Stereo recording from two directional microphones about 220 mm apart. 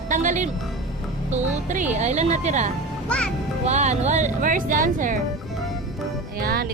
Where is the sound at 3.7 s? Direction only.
30° right (ahead or behind).